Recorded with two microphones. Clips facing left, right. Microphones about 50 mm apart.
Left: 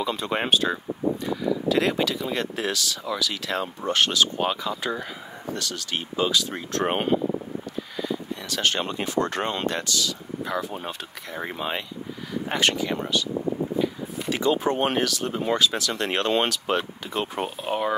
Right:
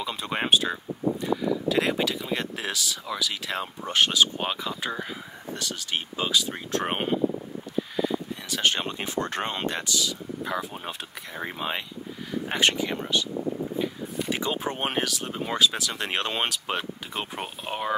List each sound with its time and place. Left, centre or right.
0.0 s speech: centre
8.5 s speech: centre
10.4 s speech: centre
12.5 s speech: right
14.3 s speech: centre